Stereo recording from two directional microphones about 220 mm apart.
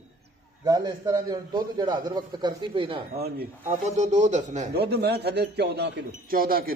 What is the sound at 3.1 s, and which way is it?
Speech, 45° right (ahead or behind).